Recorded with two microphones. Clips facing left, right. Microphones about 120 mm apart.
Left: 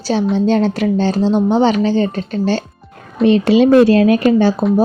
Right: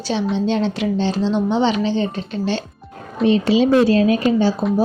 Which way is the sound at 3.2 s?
60° left (ahead or behind).